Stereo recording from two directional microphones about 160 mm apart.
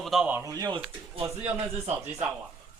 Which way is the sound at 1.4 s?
40° right (ahead or behind).